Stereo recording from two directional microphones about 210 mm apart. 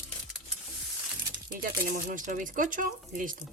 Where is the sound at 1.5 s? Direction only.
40° right (ahead or behind).